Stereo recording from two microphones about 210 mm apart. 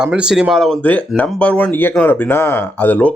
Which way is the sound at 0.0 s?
5° right (ahead or behind).